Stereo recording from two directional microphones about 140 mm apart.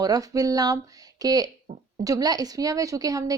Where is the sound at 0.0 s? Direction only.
25° right (ahead or behind).